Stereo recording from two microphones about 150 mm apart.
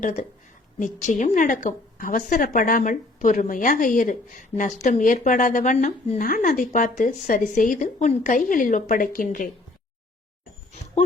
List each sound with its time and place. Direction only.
0.0 s a woman's voice: 55° left (ahead or behind)